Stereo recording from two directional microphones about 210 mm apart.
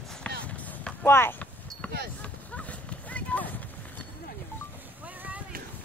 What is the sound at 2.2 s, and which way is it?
Clip-clop, 5° left (ahead or behind).